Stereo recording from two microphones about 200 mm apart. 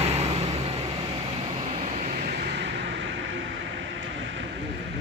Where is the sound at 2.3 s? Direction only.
60° right (ahead or behind).